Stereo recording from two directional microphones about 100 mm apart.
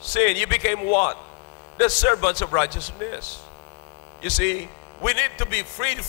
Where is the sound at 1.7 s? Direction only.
20° left (ahead or behind).